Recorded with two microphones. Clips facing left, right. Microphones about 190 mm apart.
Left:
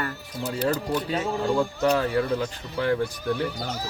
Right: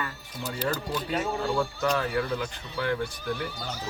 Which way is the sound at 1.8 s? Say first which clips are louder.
Left 6 dB; 35° left (ahead or behind).